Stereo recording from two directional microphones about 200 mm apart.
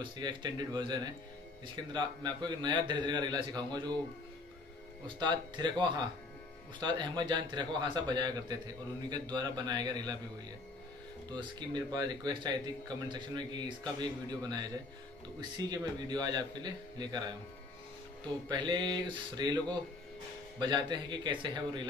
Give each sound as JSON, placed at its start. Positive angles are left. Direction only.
{"t": 0.0, "sound": "speech", "side_deg": -25}
{"t": 5.0, "sound": "speech", "side_deg": -20}
{"t": 11.2, "sound": "speech", "side_deg": -20}
{"t": 15.7, "sound": "speech", "side_deg": -20}
{"t": 18.5, "sound": "speech", "side_deg": -20}